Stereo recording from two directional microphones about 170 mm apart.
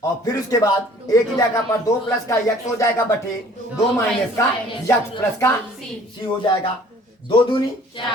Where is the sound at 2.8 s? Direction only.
15° left (ahead or behind).